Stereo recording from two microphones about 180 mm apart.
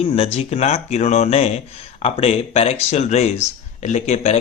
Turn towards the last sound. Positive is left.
turn(degrees=35)  # may be behind; listen again after turning